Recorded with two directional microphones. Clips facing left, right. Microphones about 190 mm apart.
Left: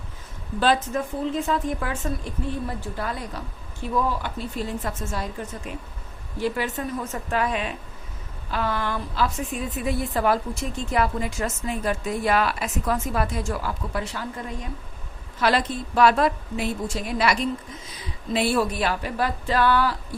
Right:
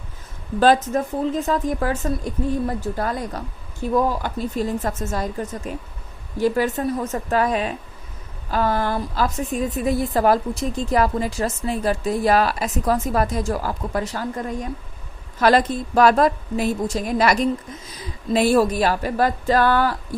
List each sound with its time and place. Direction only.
0.6 s a woman's voice: 45° right (ahead or behind)